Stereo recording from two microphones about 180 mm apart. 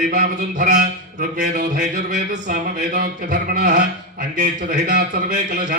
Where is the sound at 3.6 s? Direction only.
45° right (ahead or behind).